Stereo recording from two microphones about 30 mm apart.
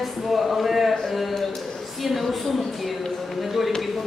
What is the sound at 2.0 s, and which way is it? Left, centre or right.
A woman's voice, centre.